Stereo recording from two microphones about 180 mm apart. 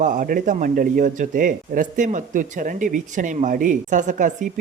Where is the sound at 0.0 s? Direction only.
45° right (ahead or behind).